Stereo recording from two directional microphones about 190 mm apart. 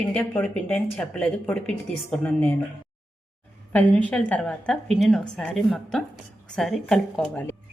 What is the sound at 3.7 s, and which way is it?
A woman's voice, 10° left (ahead or behind).